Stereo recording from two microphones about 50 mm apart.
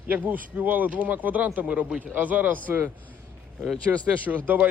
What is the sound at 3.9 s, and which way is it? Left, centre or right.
Speech, right.